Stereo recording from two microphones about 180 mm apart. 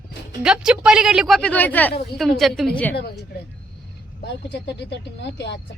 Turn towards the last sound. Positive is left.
turn(degrees=75)  # may be behind; listen again after turning